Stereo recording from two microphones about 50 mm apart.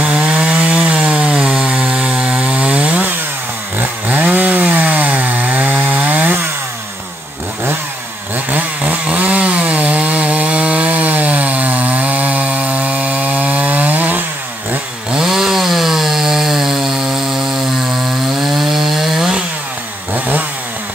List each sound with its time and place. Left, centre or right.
0.0 s wood: right
3.8 s chainsaw: right
8.5 s chainsaw: right
15.0 s chainsaw: centre